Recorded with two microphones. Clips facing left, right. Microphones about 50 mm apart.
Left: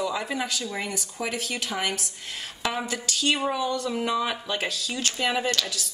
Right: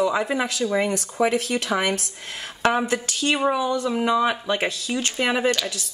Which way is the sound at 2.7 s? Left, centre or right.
Right.